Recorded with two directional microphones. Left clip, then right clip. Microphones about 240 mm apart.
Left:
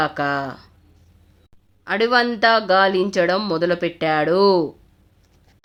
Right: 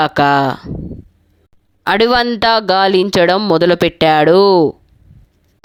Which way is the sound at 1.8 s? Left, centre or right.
Right.